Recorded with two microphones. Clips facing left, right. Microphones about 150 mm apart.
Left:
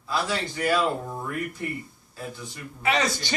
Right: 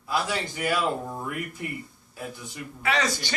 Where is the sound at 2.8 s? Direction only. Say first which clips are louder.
Left 2 dB; 20° left (ahead or behind).